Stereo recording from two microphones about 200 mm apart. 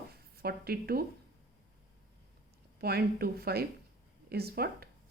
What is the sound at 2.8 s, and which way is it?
Speech, 50° right (ahead or behind).